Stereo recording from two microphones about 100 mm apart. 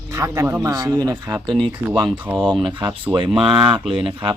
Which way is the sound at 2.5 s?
50° right (ahead or behind).